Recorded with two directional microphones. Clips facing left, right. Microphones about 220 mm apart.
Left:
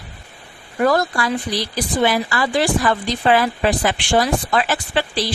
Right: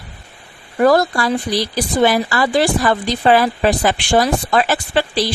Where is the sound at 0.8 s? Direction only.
35° right (ahead or behind).